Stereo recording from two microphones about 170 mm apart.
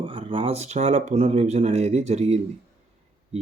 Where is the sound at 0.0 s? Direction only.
30° right (ahead or behind).